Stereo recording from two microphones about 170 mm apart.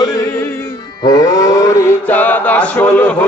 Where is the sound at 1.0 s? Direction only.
20° left (ahead or behind).